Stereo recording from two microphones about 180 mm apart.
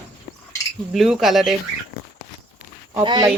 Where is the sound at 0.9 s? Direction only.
Centre (ahead or behind).